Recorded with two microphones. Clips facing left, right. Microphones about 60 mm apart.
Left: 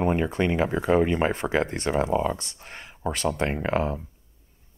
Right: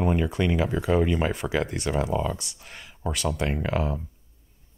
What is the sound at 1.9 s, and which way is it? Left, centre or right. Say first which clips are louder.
Speech: left 3 dB; left.